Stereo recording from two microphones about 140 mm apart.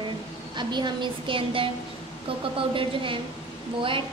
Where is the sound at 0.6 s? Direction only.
30° right (ahead or behind).